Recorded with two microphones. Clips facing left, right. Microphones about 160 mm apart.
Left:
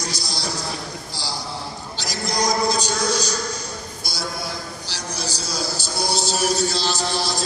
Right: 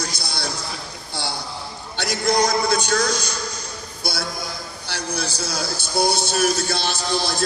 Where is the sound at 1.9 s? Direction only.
60° right (ahead or behind).